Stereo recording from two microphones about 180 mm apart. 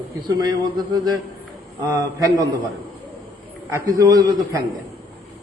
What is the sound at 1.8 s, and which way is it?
Speech, 20° right (ahead or behind).